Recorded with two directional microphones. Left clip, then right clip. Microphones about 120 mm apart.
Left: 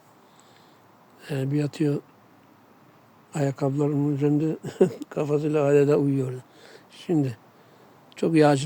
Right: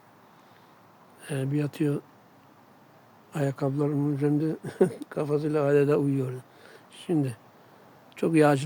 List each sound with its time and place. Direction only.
1.2 s speech: 20° left (ahead or behind)
3.3 s a man's voice: 20° left (ahead or behind)
8.1 s speech: 10° left (ahead or behind)